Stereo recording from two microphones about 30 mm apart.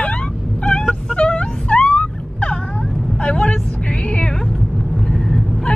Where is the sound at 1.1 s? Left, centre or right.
Left.